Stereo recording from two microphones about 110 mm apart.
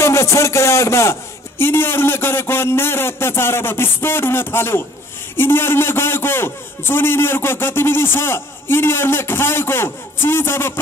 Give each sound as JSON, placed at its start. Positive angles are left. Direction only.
{"t": 0.0, "sound": "music", "side_deg": 25}
{"t": 1.6, "sound": "a man's voice", "side_deg": 20}